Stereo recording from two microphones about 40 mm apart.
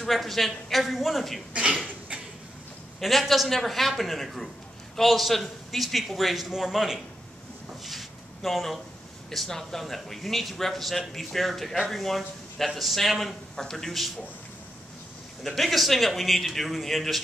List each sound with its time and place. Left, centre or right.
0.0 s a man's voice: centre
1.5 s speech: right
3.0 s a man's voice: centre
7.8 s a sound: centre
9.3 s a man's voice: centre
13.6 s a man's voice: centre
15.4 s a man's voice: centre